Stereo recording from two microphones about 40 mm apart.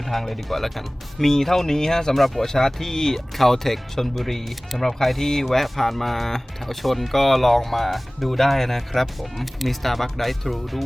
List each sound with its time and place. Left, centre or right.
0.0 s speech: centre
2.2 s speech: centre
2.5 s speech: centre